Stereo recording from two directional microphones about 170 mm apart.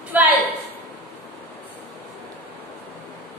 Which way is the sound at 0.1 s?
10° right (ahead or behind).